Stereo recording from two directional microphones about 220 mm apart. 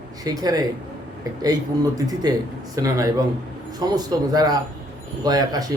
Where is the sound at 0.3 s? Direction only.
15° right (ahead or behind).